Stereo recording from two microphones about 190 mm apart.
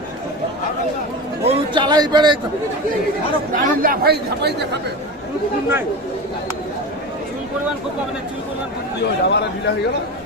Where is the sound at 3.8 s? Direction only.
50° right (ahead or behind).